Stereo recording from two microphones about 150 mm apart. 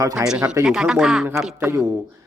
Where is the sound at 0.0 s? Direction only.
25° right (ahead or behind).